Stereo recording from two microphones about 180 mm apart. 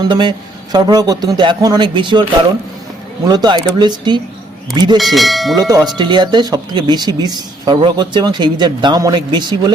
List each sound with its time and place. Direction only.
0.1 s speech: 25° right (ahead or behind)
3.2 s speech: 25° right (ahead or behind)
4.9 s speech: centre (ahead or behind)
5.5 s speech: 20° right (ahead or behind)